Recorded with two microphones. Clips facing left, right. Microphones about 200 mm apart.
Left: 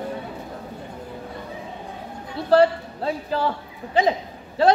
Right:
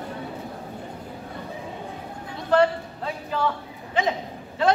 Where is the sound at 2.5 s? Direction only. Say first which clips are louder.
Left 3 dB; 35° left (ahead or behind).